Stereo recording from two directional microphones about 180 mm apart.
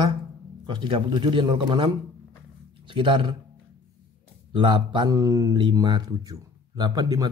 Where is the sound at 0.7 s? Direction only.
25° right (ahead or behind).